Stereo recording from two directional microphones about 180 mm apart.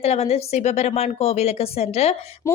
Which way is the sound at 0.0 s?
35° left (ahead or behind).